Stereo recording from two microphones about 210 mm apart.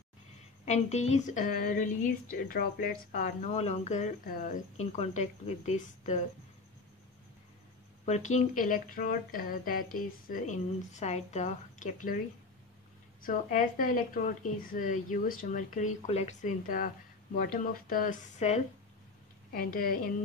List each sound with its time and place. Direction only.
0.7 s a woman's voice: 30° left (ahead or behind)
8.0 s a woman's voice: 35° left (ahead or behind)
13.2 s a woman's voice: 40° left (ahead or behind)